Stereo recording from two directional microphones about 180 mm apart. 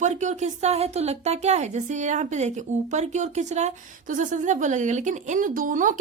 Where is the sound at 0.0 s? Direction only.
40° right (ahead or behind).